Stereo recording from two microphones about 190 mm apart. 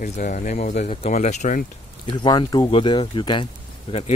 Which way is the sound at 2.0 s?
25° left (ahead or behind).